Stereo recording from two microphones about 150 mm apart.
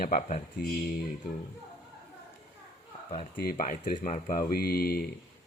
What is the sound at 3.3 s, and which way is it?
Speech, 70° left (ahead or behind).